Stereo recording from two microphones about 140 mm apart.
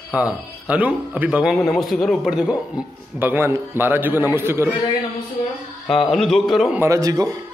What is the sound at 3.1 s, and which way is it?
A man's voice, 15° right (ahead or behind).